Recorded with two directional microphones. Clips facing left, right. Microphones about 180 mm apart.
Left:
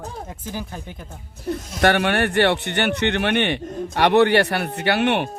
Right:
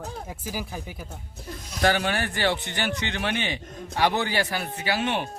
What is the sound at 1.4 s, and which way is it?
Speech, 65° left (ahead or behind).